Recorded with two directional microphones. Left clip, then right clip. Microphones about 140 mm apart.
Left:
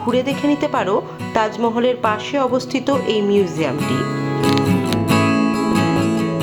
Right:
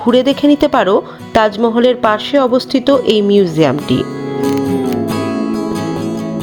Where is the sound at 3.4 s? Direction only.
50° right (ahead or behind).